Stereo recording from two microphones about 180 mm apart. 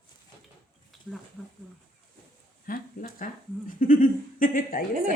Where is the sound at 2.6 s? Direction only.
50° left (ahead or behind).